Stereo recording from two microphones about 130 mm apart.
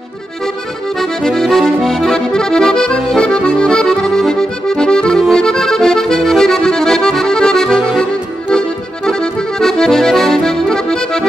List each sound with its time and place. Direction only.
0.9 s accordion: centre (ahead or behind)